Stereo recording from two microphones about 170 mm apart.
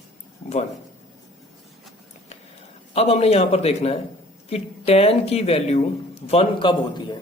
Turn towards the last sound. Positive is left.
turn(degrees=30)  # may be behind; listen again after turning